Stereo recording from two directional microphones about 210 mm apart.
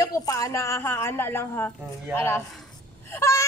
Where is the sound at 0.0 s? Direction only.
15° left (ahead or behind).